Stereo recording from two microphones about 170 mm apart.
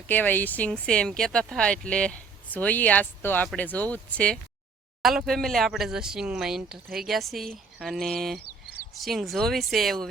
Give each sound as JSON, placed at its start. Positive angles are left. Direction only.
{"t": 0.1, "sound": "speech", "side_deg": 10}